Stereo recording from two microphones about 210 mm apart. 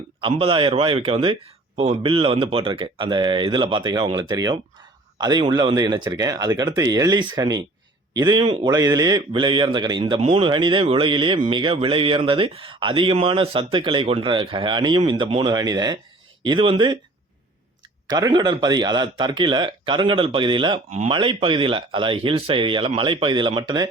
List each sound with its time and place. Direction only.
0.2 s a man's voice: 25° right (ahead or behind)
18.1 s a man's voice: 20° right (ahead or behind)